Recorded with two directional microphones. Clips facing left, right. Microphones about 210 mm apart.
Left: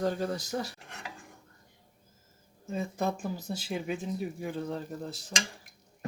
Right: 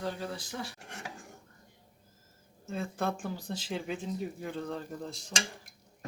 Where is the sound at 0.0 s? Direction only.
45° left (ahead or behind).